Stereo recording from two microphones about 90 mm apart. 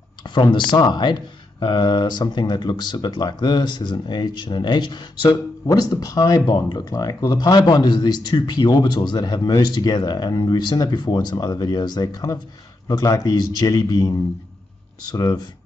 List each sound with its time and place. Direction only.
0.3 s speech: 60° left (ahead or behind)
5.7 s speech: 40° left (ahead or behind)
15.1 s speech: 45° left (ahead or behind)